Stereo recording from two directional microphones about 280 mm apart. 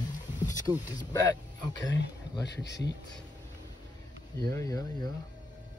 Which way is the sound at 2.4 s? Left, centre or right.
Left.